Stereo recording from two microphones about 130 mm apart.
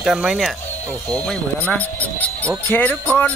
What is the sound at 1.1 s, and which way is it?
Speech, 10° left (ahead or behind).